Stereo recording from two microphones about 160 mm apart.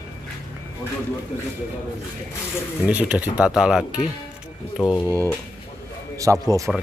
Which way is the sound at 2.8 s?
10° right (ahead or behind).